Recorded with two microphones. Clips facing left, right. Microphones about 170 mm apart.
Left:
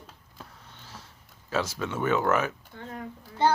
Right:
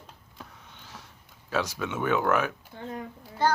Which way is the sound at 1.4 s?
15° right (ahead or behind).